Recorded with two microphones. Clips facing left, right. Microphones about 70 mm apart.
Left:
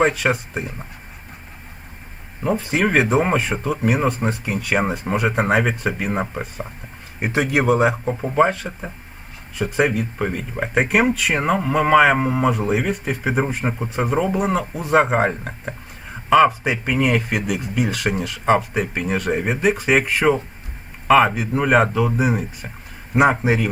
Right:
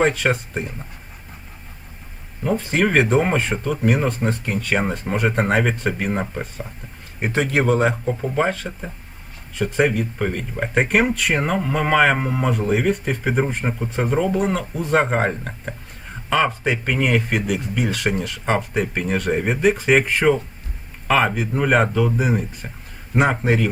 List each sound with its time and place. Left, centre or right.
0.0 s speech: centre
2.6 s speech: centre